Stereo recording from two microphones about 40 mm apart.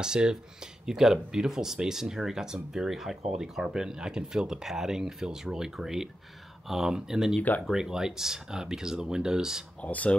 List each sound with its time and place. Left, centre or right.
0.0 s speech: right
9.8 s speech: left